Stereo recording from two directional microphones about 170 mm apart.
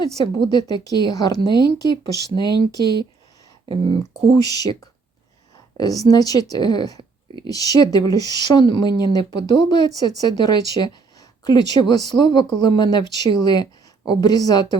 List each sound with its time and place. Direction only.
0.0 s speech: 25° left (ahead or behind)
3.9 s speech: 25° left (ahead or behind)